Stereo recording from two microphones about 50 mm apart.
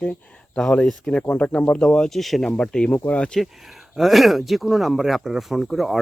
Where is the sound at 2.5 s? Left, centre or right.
Centre.